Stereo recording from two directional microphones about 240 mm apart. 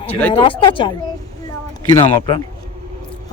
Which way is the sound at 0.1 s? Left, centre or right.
Centre.